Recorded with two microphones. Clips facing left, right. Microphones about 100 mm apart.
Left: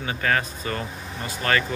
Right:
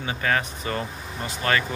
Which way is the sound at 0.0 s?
20° right (ahead or behind).